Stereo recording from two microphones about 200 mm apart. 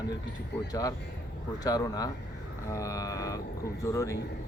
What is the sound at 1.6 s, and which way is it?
Speech, 20° left (ahead or behind).